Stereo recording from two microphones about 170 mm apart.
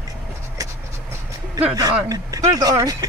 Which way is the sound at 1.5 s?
20° right (ahead or behind).